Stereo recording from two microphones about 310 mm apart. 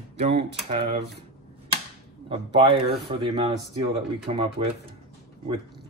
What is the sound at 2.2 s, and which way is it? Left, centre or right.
Speech, centre.